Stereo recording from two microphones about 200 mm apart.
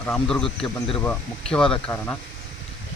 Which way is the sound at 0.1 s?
5° left (ahead or behind).